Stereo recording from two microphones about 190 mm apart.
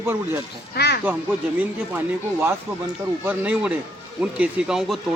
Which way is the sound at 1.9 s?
10° right (ahead or behind).